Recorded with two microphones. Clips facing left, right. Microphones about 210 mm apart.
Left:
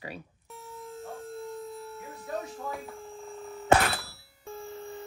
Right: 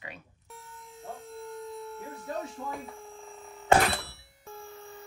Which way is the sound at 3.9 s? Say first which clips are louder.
Right 2 dB; centre (ahead or behind).